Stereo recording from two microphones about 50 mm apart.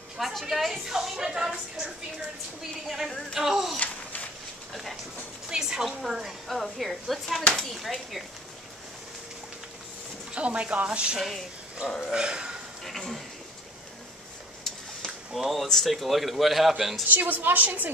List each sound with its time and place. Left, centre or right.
0.2 s a woman's voice: centre
3.3 s a woman's voice: centre
3.7 s a sound: left
5.5 s a woman's voice: centre
10.3 s a woman's voice: right
12.8 s a man's voice: centre
15.3 s a man's voice: centre
17.1 s a woman's voice: right